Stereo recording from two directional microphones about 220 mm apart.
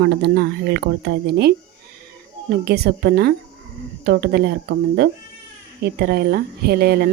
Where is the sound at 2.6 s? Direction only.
45° right (ahead or behind).